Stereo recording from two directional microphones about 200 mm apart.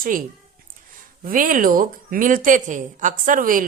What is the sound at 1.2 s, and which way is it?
A woman's voice, 45° right (ahead or behind).